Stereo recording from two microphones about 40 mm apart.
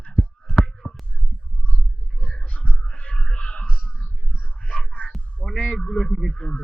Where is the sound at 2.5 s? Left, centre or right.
Left.